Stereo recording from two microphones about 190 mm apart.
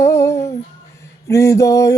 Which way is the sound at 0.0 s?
15° left (ahead or behind).